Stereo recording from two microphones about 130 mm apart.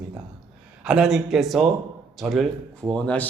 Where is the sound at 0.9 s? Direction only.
5° right (ahead or behind).